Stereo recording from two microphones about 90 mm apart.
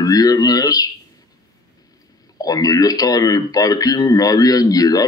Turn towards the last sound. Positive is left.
turn(degrees=45)  # may be behind; listen again after turning